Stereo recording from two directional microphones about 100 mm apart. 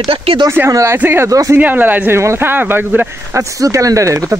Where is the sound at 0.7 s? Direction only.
30° right (ahead or behind).